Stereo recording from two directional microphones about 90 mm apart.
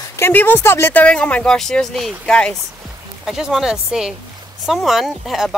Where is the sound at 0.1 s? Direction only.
25° left (ahead or behind).